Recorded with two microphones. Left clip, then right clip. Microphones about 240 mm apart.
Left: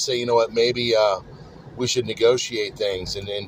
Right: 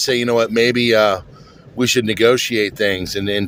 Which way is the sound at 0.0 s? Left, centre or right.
Right.